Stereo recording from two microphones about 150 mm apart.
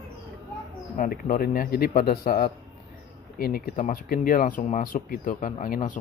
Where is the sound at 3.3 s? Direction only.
90° left.